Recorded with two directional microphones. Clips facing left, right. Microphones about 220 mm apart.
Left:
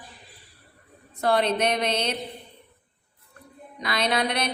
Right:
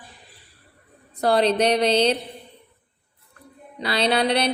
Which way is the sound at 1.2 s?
35° right (ahead or behind).